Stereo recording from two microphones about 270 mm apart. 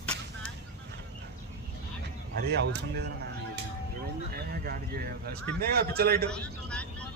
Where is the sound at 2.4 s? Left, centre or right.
Right.